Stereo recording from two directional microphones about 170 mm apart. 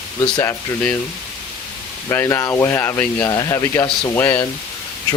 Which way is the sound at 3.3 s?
20° left (ahead or behind).